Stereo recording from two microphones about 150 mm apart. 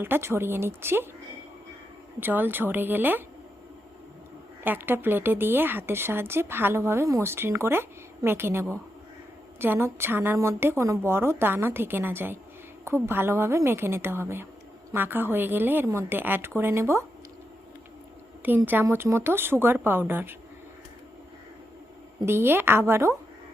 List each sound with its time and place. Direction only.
0.0 s speech: 15° right (ahead or behind)
2.2 s speech: 15° right (ahead or behind)
4.6 s speech: 15° right (ahead or behind)
18.4 s speech: 10° right (ahead or behind)
22.3 s speech: 15° right (ahead or behind)